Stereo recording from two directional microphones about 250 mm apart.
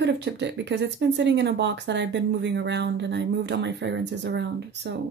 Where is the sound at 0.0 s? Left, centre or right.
Right.